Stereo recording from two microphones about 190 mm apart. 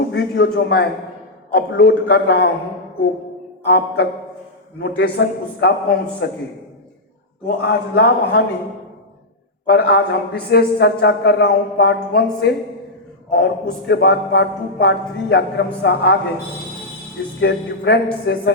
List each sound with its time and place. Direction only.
0.1 s a man's voice: 60° left (ahead or behind)
3.6 s a man's voice: 60° left (ahead or behind)
7.4 s a man's voice: 55° left (ahead or behind)
9.6 s a man's voice: 55° left (ahead or behind)
17.4 s a man's voice: 60° left (ahead or behind)